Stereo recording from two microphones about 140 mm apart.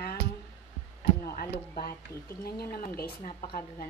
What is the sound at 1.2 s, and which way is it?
A woman's voice, 90° left.